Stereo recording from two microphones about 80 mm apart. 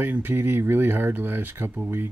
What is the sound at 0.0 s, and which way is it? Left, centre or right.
Speech, right.